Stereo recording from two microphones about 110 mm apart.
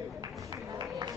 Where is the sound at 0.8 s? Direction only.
40° right (ahead or behind).